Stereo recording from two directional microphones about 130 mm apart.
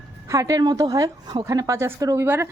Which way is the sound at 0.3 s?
25° right (ahead or behind).